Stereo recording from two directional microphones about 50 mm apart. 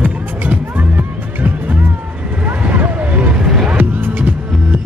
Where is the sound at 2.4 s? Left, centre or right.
Right.